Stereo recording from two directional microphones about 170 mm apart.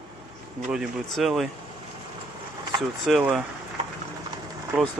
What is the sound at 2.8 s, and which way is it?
Speech, centre (ahead or behind).